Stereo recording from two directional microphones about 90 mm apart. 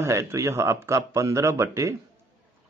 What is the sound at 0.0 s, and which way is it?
A man's voice, 30° right (ahead or behind).